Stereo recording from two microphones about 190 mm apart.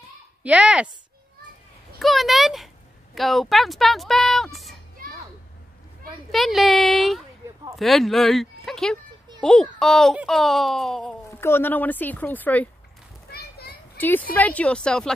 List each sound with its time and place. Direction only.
0.4 s speech: 5° right (ahead or behind)
2.0 s a sound: centre (ahead or behind)
3.2 s speech: centre (ahead or behind)
6.3 s speech: centre (ahead or behind)
13.3 s children playing: 55° left (ahead or behind)
13.9 s speech: 10° left (ahead or behind)